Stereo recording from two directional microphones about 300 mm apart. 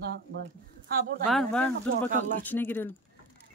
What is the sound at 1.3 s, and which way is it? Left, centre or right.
Speech, centre.